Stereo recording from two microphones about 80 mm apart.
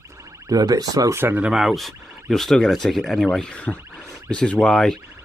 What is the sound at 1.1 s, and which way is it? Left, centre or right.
Speech, right.